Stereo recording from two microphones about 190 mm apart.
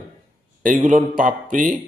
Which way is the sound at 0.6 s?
45° right (ahead or behind).